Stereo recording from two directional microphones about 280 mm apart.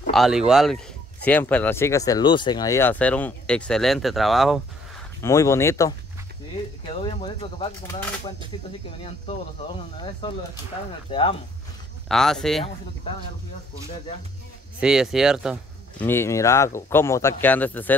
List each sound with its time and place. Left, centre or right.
0.1 s speech: centre
5.2 s speech: centre
9.9 s speech: centre
12.1 s speech: centre
14.8 s speech: centre
16.1 s speech: centre